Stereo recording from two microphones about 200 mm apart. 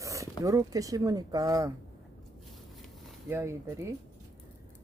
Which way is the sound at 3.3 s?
15° right (ahead or behind).